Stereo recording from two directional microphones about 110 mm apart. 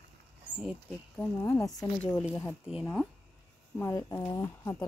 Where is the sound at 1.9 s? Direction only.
15° left (ahead or behind).